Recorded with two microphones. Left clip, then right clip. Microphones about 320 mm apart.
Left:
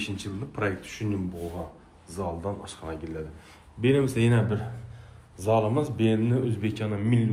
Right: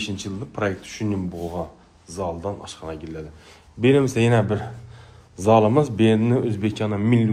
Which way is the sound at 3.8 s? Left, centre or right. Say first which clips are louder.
Right 6 dB; centre.